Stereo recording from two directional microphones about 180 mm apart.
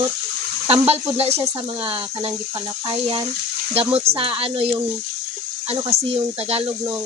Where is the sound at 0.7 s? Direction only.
35° right (ahead or behind).